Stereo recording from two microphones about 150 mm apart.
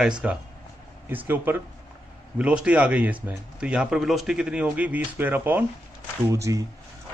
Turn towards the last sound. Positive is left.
turn(degrees=-20)  # may be behind; listen again after turning